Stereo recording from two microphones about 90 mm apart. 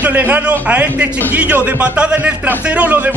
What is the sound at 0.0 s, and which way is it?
A man's voice, 20° right (ahead or behind).